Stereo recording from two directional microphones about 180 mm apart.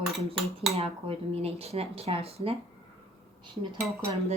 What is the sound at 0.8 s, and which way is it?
Speech, 35° right (ahead or behind).